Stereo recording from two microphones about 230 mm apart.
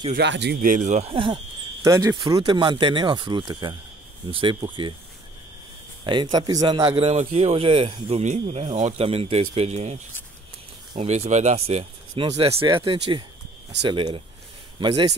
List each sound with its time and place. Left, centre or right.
0.1 s speech: right
6.3 s speech: centre